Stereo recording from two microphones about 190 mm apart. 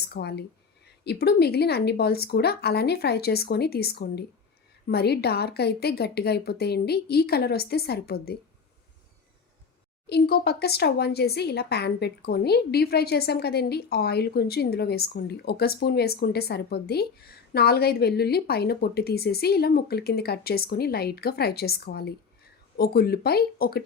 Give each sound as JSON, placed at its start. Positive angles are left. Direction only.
{"t": 0.0, "sound": "speech", "side_deg": 60}
{"t": 10.1, "sound": "speech", "side_deg": 55}